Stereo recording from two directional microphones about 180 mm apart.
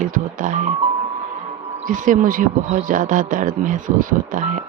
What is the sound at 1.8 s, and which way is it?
Speech, 45° right (ahead or behind).